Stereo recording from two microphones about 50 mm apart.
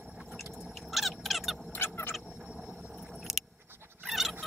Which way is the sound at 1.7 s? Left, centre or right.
Left.